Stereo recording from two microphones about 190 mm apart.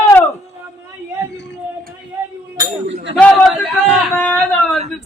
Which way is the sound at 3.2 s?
5° left (ahead or behind).